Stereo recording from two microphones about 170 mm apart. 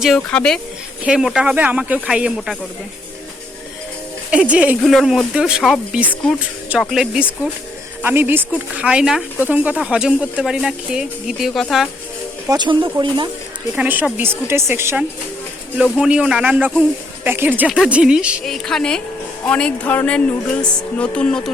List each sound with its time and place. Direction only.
0.0 s speech: 5° left (ahead or behind)
4.3 s a woman's voice: 5° right (ahead or behind)
12.5 s speech: 25° right (ahead or behind)
13.7 s a woman's voice: 10° right (ahead or behind)